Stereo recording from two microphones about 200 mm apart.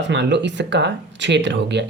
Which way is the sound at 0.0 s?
60° right (ahead or behind).